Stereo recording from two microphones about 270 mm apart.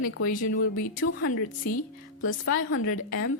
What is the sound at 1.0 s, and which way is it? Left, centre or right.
Speech, left.